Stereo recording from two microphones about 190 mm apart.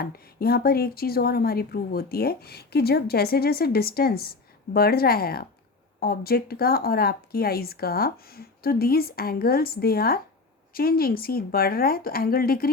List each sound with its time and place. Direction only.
0.0 s speech: 55° left (ahead or behind)